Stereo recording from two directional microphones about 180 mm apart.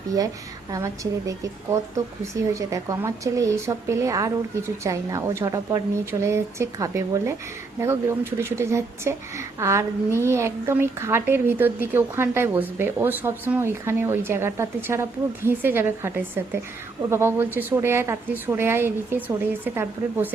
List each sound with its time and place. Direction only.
1.3 s a woman's voice: 20° right (ahead or behind)